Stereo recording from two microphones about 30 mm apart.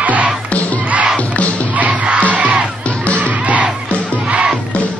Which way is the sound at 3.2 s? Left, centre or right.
Right.